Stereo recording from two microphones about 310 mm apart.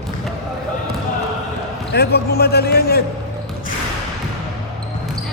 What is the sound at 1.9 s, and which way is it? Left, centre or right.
A man's voice, left.